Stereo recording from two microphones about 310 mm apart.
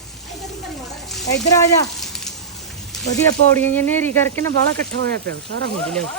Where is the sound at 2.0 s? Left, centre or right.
Centre.